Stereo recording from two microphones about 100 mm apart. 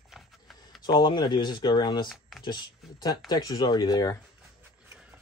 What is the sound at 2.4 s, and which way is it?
Speech, 45° left (ahead or behind).